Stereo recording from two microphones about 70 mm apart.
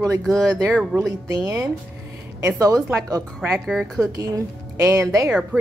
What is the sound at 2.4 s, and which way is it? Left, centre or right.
Speech, right.